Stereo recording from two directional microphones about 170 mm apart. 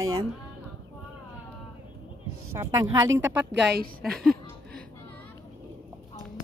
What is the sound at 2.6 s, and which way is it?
Speech, 15° right (ahead or behind).